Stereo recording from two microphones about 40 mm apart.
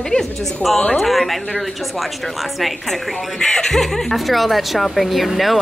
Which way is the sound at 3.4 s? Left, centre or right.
Centre.